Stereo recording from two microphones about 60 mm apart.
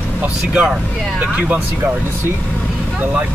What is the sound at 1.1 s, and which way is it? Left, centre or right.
Speech, right.